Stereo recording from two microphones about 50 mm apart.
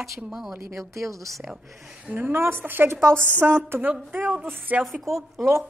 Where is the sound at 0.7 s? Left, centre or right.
Right.